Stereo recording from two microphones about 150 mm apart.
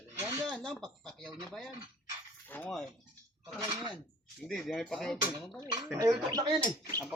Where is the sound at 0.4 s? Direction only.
Centre (ahead or behind).